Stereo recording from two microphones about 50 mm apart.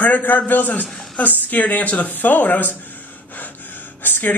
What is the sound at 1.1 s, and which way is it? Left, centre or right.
A woman's voice, left.